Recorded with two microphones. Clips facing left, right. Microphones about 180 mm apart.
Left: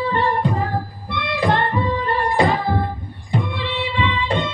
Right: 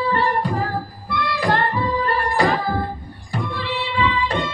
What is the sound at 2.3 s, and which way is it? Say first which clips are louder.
Singing: left 1 dB; 25° left (ahead or behind).